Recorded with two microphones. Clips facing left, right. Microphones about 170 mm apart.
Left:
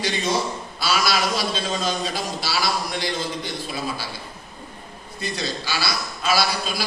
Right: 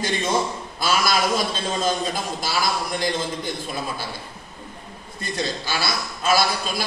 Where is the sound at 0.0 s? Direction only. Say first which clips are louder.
Right 1 dB; 50° right (ahead or behind).